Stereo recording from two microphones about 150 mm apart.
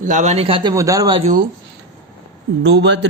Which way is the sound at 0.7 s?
20° right (ahead or behind).